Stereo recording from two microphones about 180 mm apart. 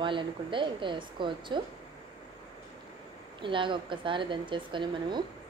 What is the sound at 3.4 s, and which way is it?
Speech, 25° right (ahead or behind).